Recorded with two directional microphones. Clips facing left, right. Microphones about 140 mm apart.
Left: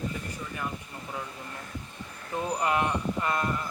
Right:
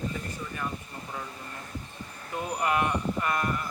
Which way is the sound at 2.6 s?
25° left (ahead or behind).